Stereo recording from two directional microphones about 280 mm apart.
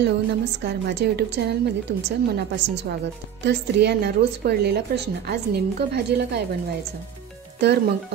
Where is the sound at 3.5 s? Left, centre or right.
Right.